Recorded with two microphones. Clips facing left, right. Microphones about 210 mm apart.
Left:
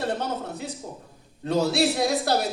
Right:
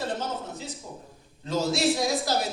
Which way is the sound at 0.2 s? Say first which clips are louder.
Left 3 dB; 60° left (ahead or behind).